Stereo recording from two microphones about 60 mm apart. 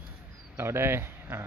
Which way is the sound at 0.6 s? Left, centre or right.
Right.